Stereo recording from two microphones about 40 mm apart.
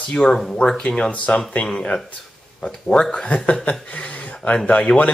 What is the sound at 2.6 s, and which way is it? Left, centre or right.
Speech, left.